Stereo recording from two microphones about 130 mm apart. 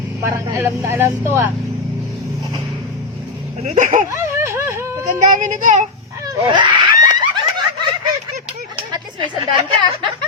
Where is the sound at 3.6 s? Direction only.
65° right (ahead or behind).